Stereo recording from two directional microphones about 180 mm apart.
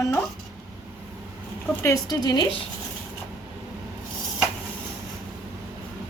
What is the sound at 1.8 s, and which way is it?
Speech, 20° left (ahead or behind).